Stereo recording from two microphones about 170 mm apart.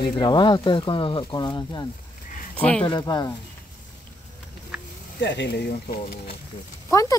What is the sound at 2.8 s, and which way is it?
Speech, 25° left (ahead or behind).